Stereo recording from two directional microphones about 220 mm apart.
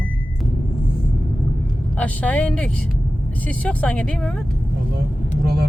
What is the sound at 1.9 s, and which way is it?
Speech, 5° left (ahead or behind).